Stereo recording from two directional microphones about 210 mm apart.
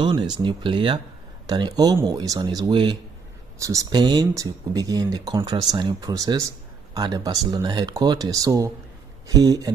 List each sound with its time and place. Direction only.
0.0 s speech: 20° right (ahead or behind)